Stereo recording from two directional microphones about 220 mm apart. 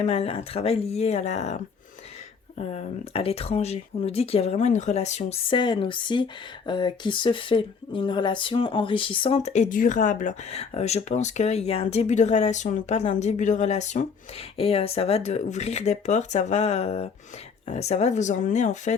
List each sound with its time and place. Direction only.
0.0 s speech: 30° left (ahead or behind)